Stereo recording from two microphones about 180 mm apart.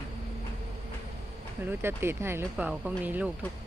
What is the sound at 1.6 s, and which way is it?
Speech, 10° right (ahead or behind).